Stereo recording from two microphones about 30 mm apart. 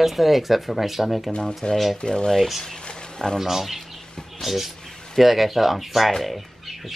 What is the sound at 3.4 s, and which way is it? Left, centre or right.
Speech, centre.